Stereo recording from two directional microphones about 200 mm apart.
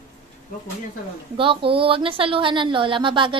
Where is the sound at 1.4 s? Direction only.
25° right (ahead or behind).